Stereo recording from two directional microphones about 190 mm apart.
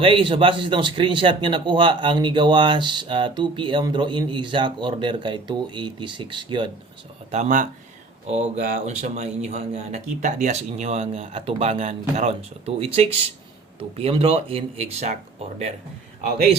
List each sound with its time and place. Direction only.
0.0 s speech: 25° right (ahead or behind)
7.3 s speech: 35° right (ahead or behind)